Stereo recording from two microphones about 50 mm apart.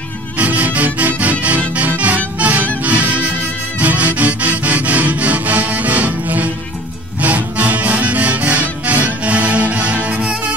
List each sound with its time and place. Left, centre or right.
0.4 s music: right